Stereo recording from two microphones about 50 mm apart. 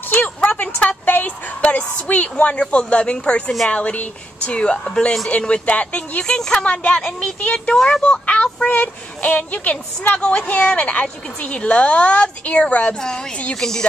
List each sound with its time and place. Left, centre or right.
0.1 s a sound: left
2.0 s a woman's voice: left
6.3 s a woman's voice: centre
6.6 s a woman's voice: left
7.7 s a woman's voice: centre
8.1 s a woman's voice: left
10.1 s a woman's voice: centre
13.6 s a woman's voice: centre